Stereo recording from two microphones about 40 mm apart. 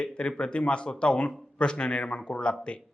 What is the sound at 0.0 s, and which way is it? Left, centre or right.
Speech, left.